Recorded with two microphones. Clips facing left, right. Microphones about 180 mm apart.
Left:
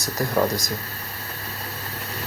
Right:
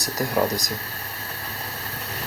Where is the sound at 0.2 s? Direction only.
15° right (ahead or behind).